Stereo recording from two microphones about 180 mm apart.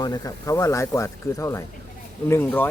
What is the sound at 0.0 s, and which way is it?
Speech, 20° left (ahead or behind).